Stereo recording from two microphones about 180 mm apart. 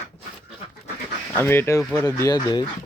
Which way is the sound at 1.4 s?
15° left (ahead or behind).